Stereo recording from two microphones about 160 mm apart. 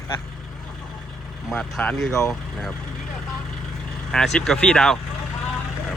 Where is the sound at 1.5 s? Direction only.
5° left (ahead or behind).